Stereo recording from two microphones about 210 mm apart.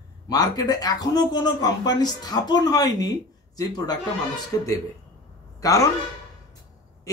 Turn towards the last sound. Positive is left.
turn(degrees=15)  # may be behind; listen again after turning